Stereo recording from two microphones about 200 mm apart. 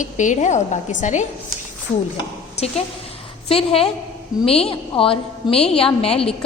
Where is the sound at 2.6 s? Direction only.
30° left (ahead or behind).